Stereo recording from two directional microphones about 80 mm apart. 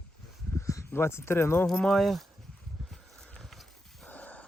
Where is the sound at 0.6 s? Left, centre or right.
Left.